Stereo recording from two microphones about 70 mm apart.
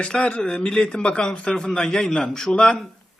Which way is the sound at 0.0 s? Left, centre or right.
Centre.